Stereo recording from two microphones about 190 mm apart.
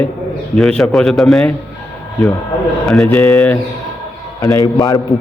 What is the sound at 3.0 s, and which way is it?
A man's voice, 10° left (ahead or behind).